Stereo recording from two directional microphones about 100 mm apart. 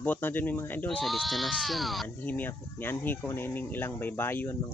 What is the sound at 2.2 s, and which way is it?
Speech, 20° left (ahead or behind).